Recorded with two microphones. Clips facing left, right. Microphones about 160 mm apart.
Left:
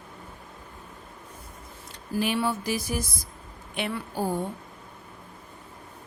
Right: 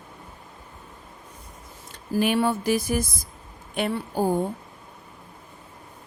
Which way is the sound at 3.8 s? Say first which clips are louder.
Right 5 dB; 40° right (ahead or behind).